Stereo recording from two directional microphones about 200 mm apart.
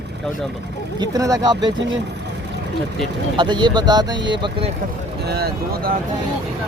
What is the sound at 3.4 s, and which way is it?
Speech, 25° right (ahead or behind).